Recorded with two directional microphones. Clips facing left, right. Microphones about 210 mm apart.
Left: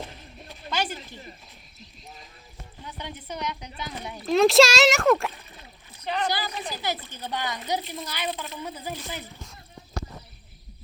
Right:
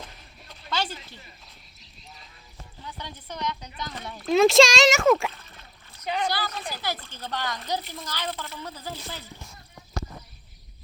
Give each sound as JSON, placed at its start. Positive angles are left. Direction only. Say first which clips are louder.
{"t": 0.7, "sound": "a sound", "louder": "left 1 dB", "side_deg": 10}
{"t": 2.8, "sound": "speech", "louder": "left 2 dB", "side_deg": 15}
{"t": 4.3, "sound": "speech", "louder": "even", "side_deg": 0}
{"t": 5.4, "sound": "splash", "louder": "left 2 dB", "side_deg": 15}
{"t": 6.2, "sound": "speech", "louder": "even", "side_deg": 15}